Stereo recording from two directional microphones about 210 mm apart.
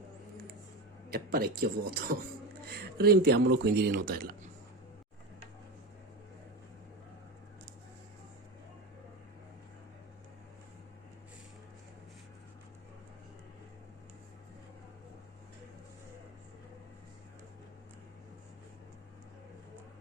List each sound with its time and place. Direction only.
1.1 s a man's voice: 45° right (ahead or behind)